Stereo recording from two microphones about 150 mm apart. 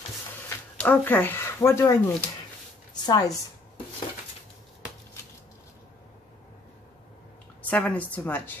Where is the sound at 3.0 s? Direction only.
25° left (ahead or behind).